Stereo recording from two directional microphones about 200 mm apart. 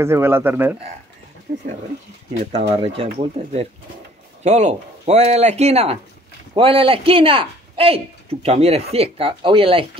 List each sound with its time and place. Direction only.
0.0 s speech: 10° right (ahead or behind)
1.5 s speech: 50° right (ahead or behind)
2.5 s speech: 30° right (ahead or behind)